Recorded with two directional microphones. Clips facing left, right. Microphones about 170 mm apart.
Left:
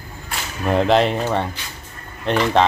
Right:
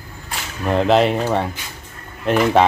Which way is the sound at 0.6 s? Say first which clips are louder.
Right 1 dB; centre (ahead or behind).